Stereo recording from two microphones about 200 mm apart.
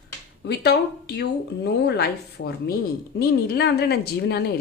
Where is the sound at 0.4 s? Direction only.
55° left (ahead or behind).